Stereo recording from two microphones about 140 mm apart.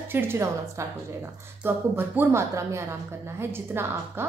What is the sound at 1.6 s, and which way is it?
A woman's voice, 15° right (ahead or behind).